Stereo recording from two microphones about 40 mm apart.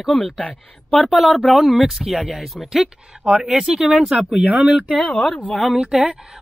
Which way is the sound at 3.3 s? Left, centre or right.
Right.